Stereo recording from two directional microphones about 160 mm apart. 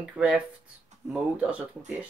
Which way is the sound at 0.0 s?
5° right (ahead or behind).